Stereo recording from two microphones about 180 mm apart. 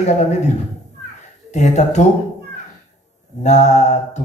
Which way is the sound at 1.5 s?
40° left (ahead or behind).